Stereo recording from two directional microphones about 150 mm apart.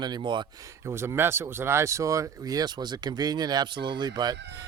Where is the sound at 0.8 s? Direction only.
15° right (ahead or behind).